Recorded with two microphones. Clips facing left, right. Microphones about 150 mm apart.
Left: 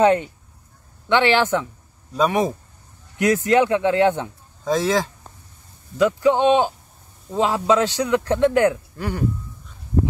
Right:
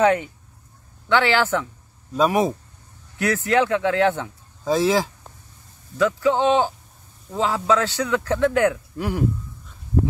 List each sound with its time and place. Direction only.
1.0 s speech: 20° left (ahead or behind)
2.1 s speech: 5° right (ahead or behind)
3.2 s speech: 15° left (ahead or behind)
4.6 s speech: 5° right (ahead or behind)
5.9 s speech: 20° left (ahead or behind)
8.9 s speech: 5° right (ahead or behind)